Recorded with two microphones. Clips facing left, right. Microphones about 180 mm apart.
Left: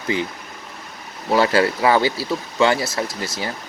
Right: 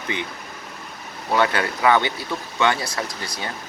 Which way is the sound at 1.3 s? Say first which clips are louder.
Left 4 dB; 30° left (ahead or behind).